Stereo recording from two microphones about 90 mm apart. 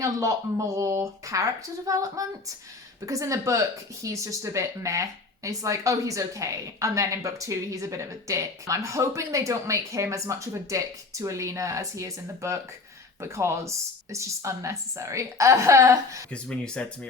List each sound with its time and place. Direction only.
0.0 s speech: 35° right (ahead or behind)
16.3 s speech: 10° left (ahead or behind)